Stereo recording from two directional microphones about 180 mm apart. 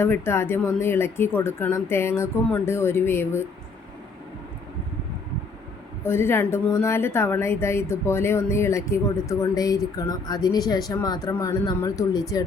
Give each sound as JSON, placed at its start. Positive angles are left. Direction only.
{"t": 0.0, "sound": "speech", "side_deg": 15}
{"t": 6.1, "sound": "speech", "side_deg": 15}